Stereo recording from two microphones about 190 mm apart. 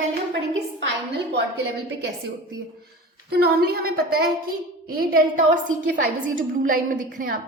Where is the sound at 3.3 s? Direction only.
55° right (ahead or behind).